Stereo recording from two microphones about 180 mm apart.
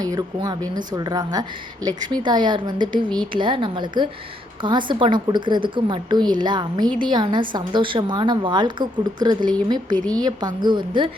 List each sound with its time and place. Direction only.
0.0 s a woman's voice: 20° right (ahead or behind)